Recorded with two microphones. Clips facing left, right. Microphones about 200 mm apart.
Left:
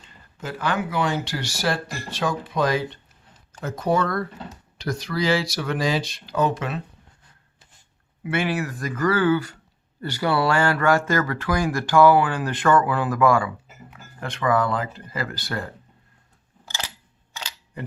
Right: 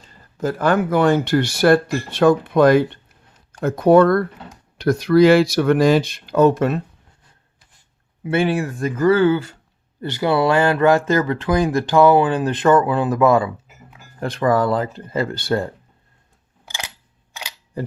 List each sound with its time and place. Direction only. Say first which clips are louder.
0.0 s speech: right 12 dB; 40° right (ahead or behind)
8.2 s speech: right 6 dB; 30° right (ahead or behind)
14.2 s speech: right 4 dB; 35° right (ahead or behind)